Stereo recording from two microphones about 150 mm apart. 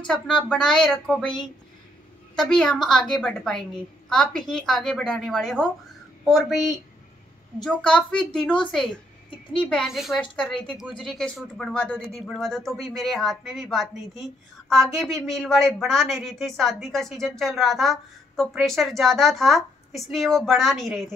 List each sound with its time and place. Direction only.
0.0 s speech: 5° left (ahead or behind)
2.3 s speech: centre (ahead or behind)